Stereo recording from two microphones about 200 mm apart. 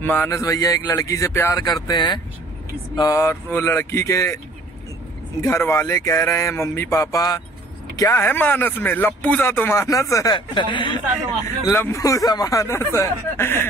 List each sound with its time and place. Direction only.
0.0 s speech: 10° left (ahead or behind)
5.4 s speech: 15° left (ahead or behind)
11.6 s speech: 10° left (ahead or behind)